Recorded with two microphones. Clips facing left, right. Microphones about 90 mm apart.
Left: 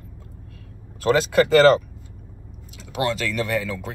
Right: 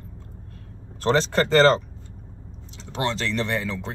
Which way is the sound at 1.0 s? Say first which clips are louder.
Left 3 dB; 30° right (ahead or behind).